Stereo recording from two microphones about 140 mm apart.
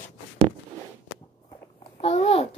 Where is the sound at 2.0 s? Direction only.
45° left (ahead or behind).